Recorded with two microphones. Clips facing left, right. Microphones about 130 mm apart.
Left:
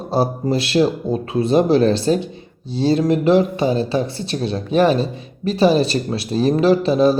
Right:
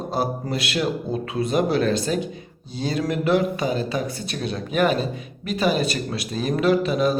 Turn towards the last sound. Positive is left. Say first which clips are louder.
# left 5 dB
turn(degrees=30)  # may be behind; listen again after turning